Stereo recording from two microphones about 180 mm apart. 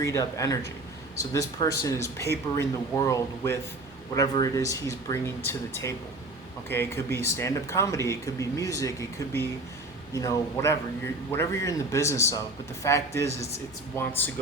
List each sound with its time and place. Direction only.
0.0 s speech: 15° left (ahead or behind)